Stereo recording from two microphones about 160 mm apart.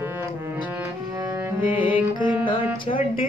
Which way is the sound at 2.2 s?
30° left (ahead or behind).